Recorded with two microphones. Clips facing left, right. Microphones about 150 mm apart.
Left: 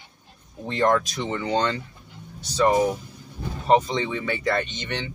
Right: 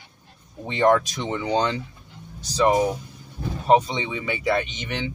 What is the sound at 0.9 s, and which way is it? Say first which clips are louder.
Speech: right 5 dB; 15° right (ahead or behind).